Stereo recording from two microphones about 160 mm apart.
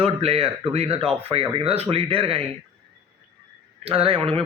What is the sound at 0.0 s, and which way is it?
Speech, 40° right (ahead or behind).